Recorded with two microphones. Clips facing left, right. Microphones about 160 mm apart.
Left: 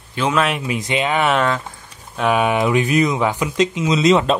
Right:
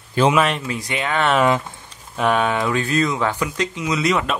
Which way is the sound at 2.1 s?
Centre (ahead or behind).